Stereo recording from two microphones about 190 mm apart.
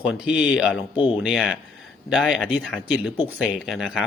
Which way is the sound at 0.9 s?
25° left (ahead or behind).